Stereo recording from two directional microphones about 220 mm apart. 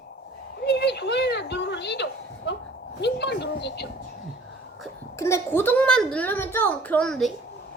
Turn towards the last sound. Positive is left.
turn(degrees=0)  # may be behind; listen again after turning